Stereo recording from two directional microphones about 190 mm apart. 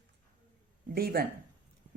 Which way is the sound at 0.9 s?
55° right (ahead or behind).